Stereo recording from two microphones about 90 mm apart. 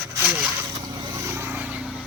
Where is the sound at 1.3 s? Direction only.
20° right (ahead or behind).